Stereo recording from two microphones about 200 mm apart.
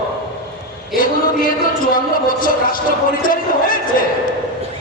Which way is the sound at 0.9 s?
45° left (ahead or behind).